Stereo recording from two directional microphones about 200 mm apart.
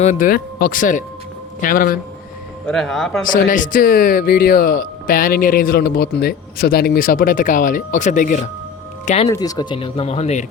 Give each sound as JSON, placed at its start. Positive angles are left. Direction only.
{"t": 0.0, "sound": "speech", "side_deg": 40}
{"t": 2.6, "sound": "speech", "side_deg": 5}
{"t": 3.2, "sound": "speech", "side_deg": 40}
{"t": 9.0, "sound": "speech", "side_deg": 30}
{"t": 9.3, "sound": "speech", "side_deg": 20}